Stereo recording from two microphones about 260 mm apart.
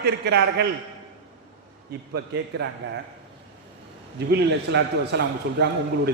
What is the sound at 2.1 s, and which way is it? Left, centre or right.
Speech, right.